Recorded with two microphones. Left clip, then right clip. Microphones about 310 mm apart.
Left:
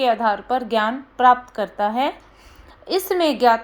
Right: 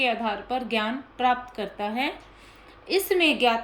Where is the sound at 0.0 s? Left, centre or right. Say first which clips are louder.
Left 7 dB; centre.